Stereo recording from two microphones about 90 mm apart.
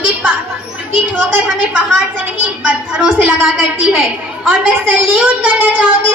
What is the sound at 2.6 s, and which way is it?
Speech, 10° right (ahead or behind).